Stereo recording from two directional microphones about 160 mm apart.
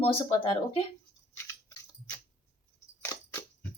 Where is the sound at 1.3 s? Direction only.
20° left (ahead or behind).